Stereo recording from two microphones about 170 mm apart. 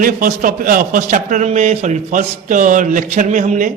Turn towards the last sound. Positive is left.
turn(degrees=-50)  # may be behind; listen again after turning